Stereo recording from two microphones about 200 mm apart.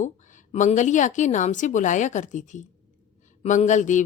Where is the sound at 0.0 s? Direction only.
40° left (ahead or behind).